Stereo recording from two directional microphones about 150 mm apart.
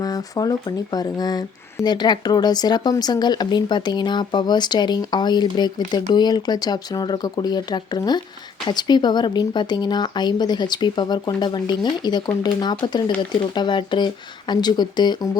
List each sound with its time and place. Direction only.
0.0 s speech: 25° left (ahead or behind)